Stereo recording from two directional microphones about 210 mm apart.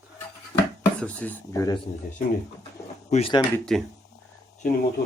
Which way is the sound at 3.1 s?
25° left (ahead or behind).